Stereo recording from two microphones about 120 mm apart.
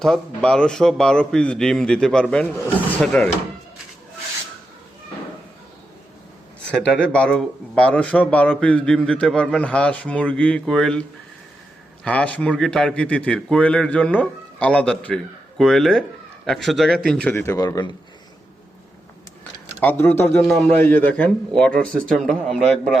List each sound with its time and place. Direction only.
0.0 s a man's voice: 5° left (ahead or behind)
6.7 s a man's voice: 5° left (ahead or behind)
12.0 s a man's voice: 10° left (ahead or behind)
17.4 s a man's voice: 25° left (ahead or behind)
19.8 s a man's voice: 15° left (ahead or behind)
20.4 s speech: centre (ahead or behind)
20.7 s a man's voice: 15° left (ahead or behind)